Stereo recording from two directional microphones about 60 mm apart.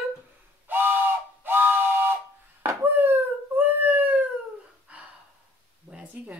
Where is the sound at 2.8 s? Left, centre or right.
Right.